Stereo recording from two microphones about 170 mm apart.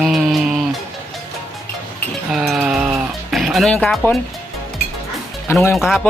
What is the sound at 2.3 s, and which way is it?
Music, 5° right (ahead or behind).